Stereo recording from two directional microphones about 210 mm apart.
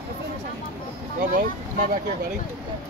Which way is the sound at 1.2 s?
40° right (ahead or behind).